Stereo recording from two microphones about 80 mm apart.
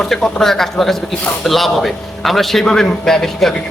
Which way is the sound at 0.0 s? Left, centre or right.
Centre.